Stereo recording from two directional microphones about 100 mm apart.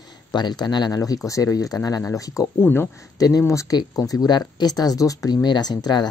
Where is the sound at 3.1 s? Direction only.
40° left (ahead or behind).